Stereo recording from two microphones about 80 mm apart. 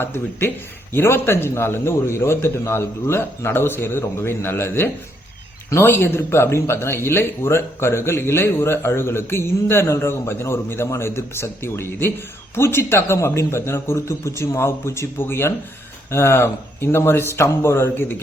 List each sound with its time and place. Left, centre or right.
0.0 s speech: left